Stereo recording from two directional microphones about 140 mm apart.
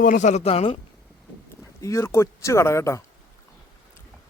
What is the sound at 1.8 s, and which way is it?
Speech, 20° left (ahead or behind).